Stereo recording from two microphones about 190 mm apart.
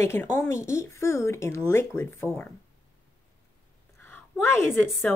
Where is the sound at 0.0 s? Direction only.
15° left (ahead or behind).